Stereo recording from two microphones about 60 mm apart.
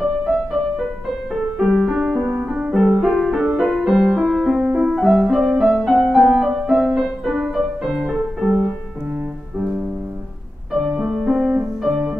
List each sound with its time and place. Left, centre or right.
0.0 s music: centre
2.0 s music: right
3.0 s music: centre
4.9 s music: centre
5.9 s music: centre
10.9 s music: centre
11.2 s music: centre